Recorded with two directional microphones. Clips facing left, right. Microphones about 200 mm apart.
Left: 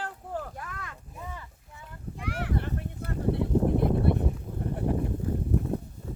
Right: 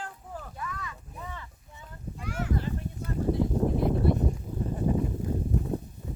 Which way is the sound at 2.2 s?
65° left (ahead or behind).